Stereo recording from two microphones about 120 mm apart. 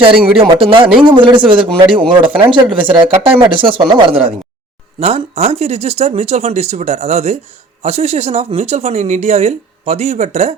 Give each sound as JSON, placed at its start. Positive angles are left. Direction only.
{"t": 0.0, "sound": "speech", "side_deg": -45}